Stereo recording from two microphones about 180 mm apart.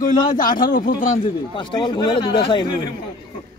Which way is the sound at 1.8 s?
25° left (ahead or behind).